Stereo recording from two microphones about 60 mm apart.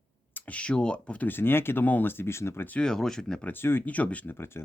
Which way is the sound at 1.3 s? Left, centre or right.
Left.